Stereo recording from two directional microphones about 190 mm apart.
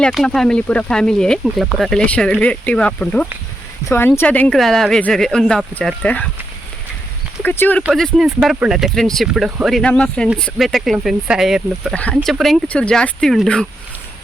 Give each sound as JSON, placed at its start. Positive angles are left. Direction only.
{"t": 0.0, "sound": "speech", "side_deg": 5}
{"t": 7.4, "sound": "speech", "side_deg": 10}
{"t": 7.9, "sound": "speech", "side_deg": 0}